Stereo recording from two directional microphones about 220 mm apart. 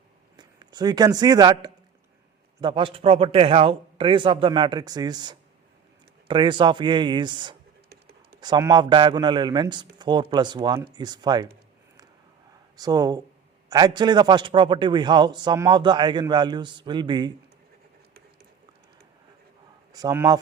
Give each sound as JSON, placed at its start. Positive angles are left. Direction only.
{"t": 0.3, "sound": "a man's voice", "side_deg": -20}
{"t": 7.9, "sound": "computer keyboard", "side_deg": -45}
{"t": 8.4, "sound": "a man's voice", "side_deg": -20}
{"t": 12.7, "sound": "a man's voice", "side_deg": -15}
{"t": 19.9, "sound": "speech", "side_deg": -15}